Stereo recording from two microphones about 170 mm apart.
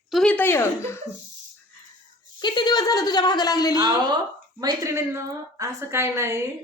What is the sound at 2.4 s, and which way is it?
A woman's voice, 25° left (ahead or behind).